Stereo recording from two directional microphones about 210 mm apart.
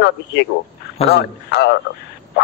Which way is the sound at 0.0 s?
55° left (ahead or behind).